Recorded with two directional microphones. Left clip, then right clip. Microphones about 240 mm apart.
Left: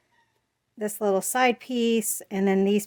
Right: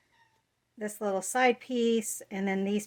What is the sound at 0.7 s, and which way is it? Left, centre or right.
Speech, left.